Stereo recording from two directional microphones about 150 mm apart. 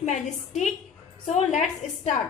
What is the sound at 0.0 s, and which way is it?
A woman's voice, 50° left (ahead or behind).